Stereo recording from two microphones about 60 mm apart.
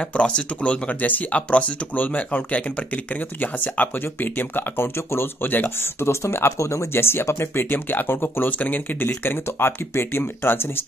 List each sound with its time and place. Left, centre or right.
0.0 s speech: centre; by 10.9 s left